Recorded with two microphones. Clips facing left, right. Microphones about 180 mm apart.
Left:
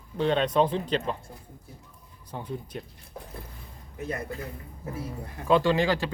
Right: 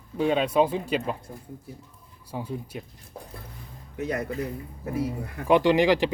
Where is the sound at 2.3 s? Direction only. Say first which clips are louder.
Right 2 dB; 10° right (ahead or behind).